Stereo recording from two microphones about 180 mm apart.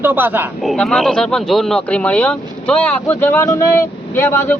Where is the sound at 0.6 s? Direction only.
Centre (ahead or behind).